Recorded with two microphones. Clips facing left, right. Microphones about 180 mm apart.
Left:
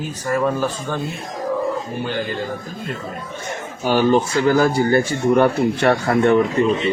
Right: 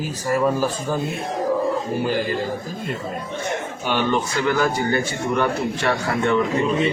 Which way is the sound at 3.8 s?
35° left (ahead or behind).